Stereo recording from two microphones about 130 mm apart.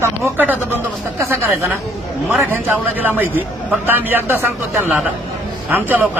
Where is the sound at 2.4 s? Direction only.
15° right (ahead or behind).